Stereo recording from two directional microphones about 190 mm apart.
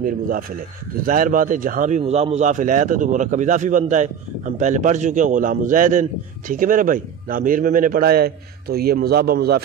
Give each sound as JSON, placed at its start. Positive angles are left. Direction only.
{"t": 1.0, "sound": "a man's voice", "side_deg": -45}